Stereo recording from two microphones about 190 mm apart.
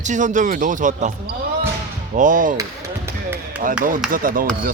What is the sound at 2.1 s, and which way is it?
Speech, 45° right (ahead or behind).